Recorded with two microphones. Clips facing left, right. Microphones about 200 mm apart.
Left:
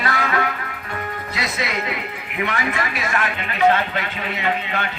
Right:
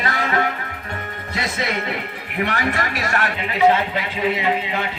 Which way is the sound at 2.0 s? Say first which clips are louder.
Right 1 dB; 40° right (ahead or behind).